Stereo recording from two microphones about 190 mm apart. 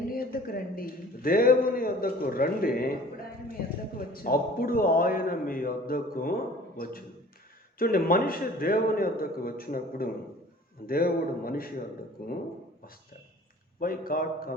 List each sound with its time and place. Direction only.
0.1 s a man's voice: 50° left (ahead or behind)
3.9 s a man's voice: 50° left (ahead or behind)
13.7 s a man's voice: 50° left (ahead or behind)